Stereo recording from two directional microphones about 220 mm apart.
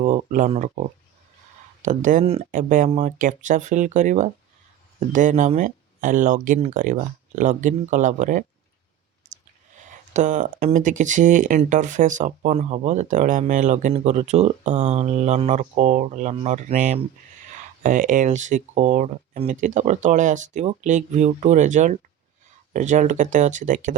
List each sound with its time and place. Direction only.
0.0 s speech: 35° right (ahead or behind)
9.9 s speech: 35° right (ahead or behind)